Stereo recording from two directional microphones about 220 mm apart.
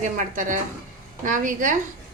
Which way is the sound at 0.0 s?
35° right (ahead or behind).